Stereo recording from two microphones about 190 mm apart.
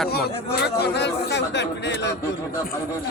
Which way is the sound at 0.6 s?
60° left (ahead or behind).